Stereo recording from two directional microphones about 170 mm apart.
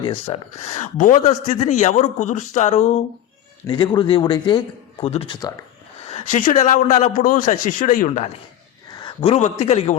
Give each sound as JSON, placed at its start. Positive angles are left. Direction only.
{"t": 0.0, "sound": "speech", "side_deg": 35}
{"t": 3.7, "sound": "a man's voice", "side_deg": 30}
{"t": 6.1, "sound": "speech", "side_deg": 45}
{"t": 8.9, "sound": "a man's voice", "side_deg": 25}